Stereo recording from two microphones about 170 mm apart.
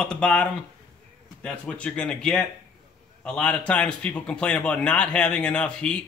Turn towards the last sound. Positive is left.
turn(degrees=5)  # may be behind; listen again after turning